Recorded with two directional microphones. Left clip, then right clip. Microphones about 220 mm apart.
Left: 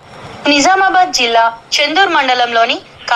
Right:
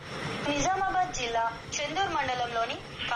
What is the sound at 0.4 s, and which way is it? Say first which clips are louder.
A woman's voice: left 19 dB; 45° left (ahead or behind).